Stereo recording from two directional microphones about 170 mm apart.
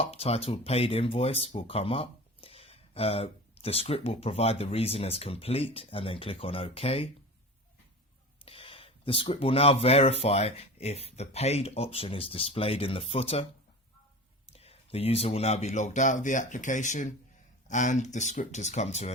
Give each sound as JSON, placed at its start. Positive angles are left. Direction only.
{"t": 0.0, "sound": "speech", "side_deg": 35}
{"t": 8.4, "sound": "speech", "side_deg": 35}
{"t": 14.5, "sound": "speech", "side_deg": 35}